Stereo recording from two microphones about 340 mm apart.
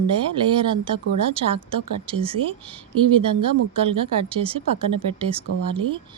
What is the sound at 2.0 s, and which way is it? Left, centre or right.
Speech, centre.